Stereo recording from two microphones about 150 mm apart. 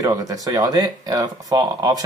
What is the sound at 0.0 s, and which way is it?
Speech, 25° right (ahead or behind).